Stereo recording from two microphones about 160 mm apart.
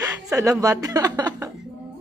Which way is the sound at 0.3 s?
20° right (ahead or behind).